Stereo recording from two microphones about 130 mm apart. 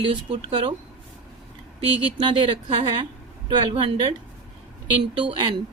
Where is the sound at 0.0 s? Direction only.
45° right (ahead or behind).